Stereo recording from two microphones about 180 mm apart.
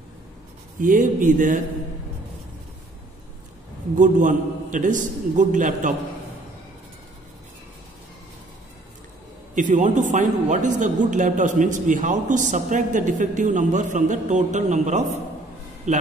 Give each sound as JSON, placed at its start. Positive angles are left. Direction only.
{"t": 0.7, "sound": "a man's voice", "side_deg": -50}
{"t": 3.9, "sound": "a man's voice", "side_deg": -45}
{"t": 9.6, "sound": "a man's voice", "side_deg": -45}